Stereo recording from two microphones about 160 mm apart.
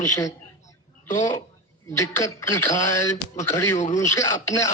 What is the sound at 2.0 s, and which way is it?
A man's voice, 20° left (ahead or behind).